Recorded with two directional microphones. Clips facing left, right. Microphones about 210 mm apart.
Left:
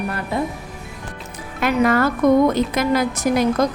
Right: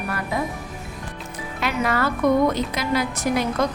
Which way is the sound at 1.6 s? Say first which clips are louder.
Left 6 dB; 50° left (ahead or behind).